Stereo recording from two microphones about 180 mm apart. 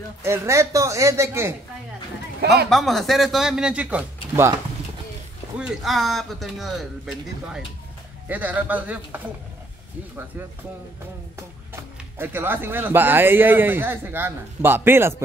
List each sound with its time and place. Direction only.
0.2 s speech: 15° right (ahead or behind)
2.7 s speech: centre (ahead or behind)
5.6 s speech: centre (ahead or behind)
11.3 s speech: 15° right (ahead or behind)